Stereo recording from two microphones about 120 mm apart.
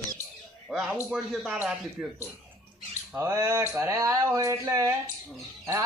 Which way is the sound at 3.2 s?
25° right (ahead or behind).